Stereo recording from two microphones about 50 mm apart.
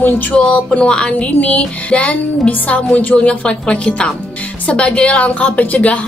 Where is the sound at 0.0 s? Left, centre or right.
Left.